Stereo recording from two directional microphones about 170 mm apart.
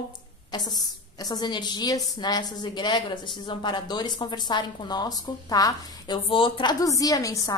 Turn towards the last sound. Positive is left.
turn(degrees=20)  # may be behind; listen again after turning